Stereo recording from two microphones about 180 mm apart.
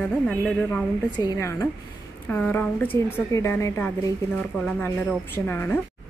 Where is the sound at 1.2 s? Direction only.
20° left (ahead or behind).